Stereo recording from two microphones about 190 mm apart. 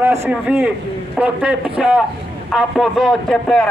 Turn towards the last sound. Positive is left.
turn(degrees=0)  # may be behind; listen again after turning